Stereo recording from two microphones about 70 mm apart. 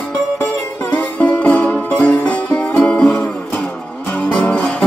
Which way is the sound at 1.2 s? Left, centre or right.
Centre.